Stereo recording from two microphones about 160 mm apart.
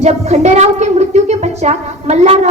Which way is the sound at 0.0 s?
45° right (ahead or behind).